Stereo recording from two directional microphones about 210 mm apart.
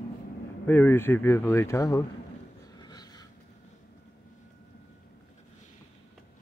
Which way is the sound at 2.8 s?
20° left (ahead or behind).